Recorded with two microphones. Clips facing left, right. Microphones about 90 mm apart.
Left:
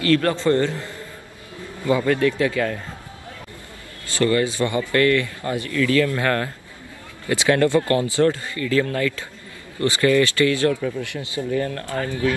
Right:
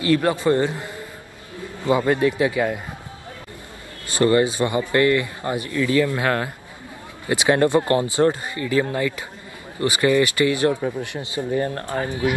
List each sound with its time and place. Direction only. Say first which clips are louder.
0.0 s a man's voice: even; 15° right (ahead or behind)
4.1 s a man's voice: right 2 dB; 25° right (ahead or behind)
11.8 s a man's voice: even; 20° right (ahead or behind)